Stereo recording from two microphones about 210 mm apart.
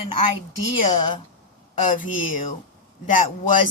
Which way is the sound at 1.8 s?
40° left (ahead or behind).